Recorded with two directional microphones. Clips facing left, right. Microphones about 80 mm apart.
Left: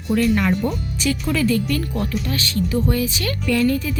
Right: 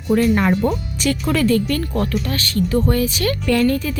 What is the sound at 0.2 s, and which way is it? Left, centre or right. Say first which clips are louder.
Speech: even; right.